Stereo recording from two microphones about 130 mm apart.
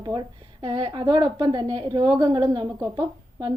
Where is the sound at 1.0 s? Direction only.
30° right (ahead or behind).